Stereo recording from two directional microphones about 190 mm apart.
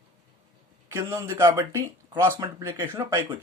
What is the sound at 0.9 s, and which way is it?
Speech, 15° right (ahead or behind).